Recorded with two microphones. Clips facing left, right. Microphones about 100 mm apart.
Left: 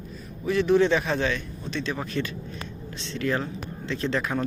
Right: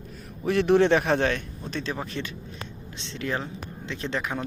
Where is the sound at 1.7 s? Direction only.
35° right (ahead or behind).